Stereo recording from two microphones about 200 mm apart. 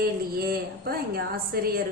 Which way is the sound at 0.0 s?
50° right (ahead or behind).